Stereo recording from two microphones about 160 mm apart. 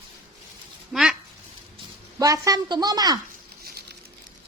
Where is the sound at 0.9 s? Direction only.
Centre (ahead or behind).